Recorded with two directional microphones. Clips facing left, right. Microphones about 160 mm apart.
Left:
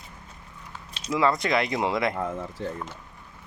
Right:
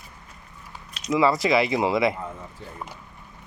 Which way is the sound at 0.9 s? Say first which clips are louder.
Right 5 dB; 30° left (ahead or behind).